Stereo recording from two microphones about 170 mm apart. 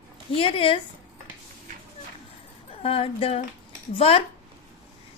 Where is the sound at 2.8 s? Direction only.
35° left (ahead or behind).